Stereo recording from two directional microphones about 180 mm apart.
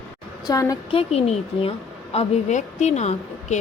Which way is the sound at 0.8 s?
35° left (ahead or behind).